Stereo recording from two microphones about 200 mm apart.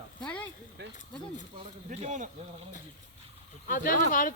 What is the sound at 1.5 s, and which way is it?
Speech, 35° right (ahead or behind).